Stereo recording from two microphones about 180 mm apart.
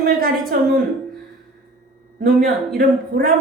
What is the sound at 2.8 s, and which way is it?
Speech, 55° right (ahead or behind).